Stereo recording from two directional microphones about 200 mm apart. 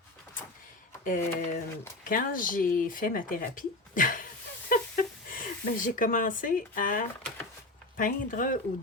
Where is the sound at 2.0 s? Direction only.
45° left (ahead or behind).